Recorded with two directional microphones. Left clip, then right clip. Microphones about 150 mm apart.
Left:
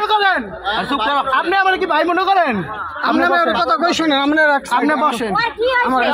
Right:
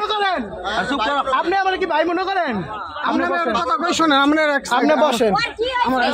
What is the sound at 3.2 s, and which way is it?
Speech, 40° left (ahead or behind).